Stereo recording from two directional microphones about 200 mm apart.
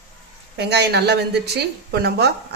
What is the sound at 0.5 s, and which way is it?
A woman's voice, 55° right (ahead or behind).